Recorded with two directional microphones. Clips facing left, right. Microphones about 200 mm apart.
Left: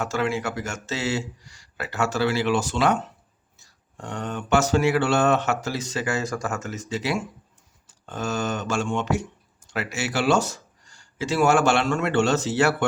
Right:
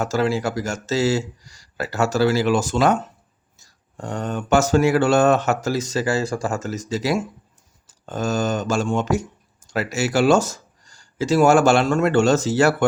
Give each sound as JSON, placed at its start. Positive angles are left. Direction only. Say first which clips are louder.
{"t": 0.0, "sound": "speech", "louder": "right 4 dB", "side_deg": -40}